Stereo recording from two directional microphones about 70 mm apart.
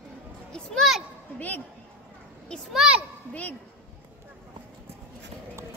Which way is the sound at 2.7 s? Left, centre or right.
Centre.